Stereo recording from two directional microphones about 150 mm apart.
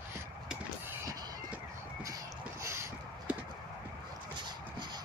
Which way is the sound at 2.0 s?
20° right (ahead or behind).